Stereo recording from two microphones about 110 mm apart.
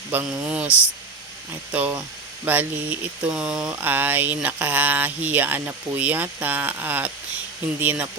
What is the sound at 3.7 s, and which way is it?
Speech, 15° right (ahead or behind).